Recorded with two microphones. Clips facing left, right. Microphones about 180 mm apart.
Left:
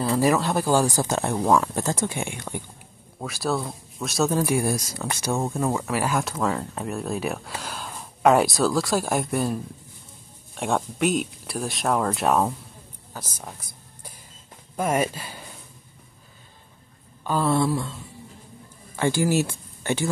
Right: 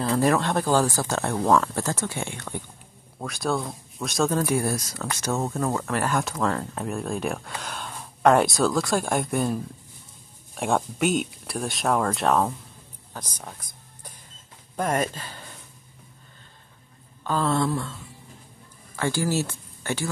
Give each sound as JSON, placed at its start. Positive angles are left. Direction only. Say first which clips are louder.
{"t": 0.0, "sound": "speech", "louder": "left 1 dB", "side_deg": 5}
{"t": 3.2, "sound": "speech", "louder": "even", "side_deg": 0}
{"t": 13.1, "sound": "a sound", "louder": "left 1 dB", "side_deg": 5}
{"t": 14.8, "sound": "speech", "louder": "left 2 dB", "side_deg": 10}
{"t": 17.2, "sound": "speech", "louder": "left 2 dB", "side_deg": 10}
{"t": 18.9, "sound": "speech", "louder": "left 3 dB", "side_deg": 15}